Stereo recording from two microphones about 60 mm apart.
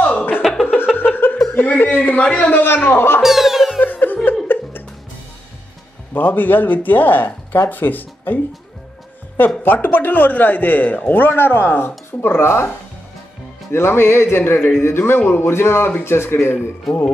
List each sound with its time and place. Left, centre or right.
0.0 s music: left
0.4 s music: centre
0.9 s laughter: left
1.5 s chuckle: left
2.2 s speech: centre
2.5 s a man's voice: left
3.2 s music: centre
3.8 s music: left
6.1 s a man's voice: left
9.6 s a man's voice: left
13.7 s a man's voice: left
16.9 s speech: centre